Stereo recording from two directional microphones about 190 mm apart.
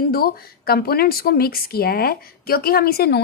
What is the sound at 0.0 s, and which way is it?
Speech, 50° left (ahead or behind).